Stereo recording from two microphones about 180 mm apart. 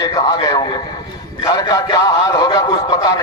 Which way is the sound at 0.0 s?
20° left (ahead or behind).